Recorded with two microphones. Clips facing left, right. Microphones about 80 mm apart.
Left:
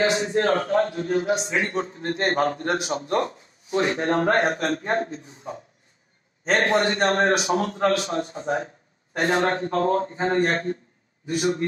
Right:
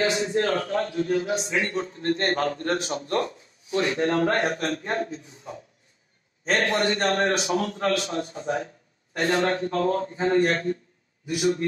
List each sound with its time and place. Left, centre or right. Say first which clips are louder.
0.0 s a man's voice: left 2 dB; left
1.9 s a man's voice: right 2 dB; centre
2.2 s a man's voice: left 5 dB; left
6.6 s a man's voice: left 3 dB; left